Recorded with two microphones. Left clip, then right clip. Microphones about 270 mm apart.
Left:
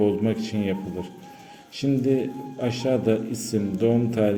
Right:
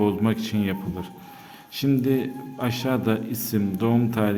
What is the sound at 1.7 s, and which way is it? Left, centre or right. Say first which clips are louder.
A man's voice: even; right.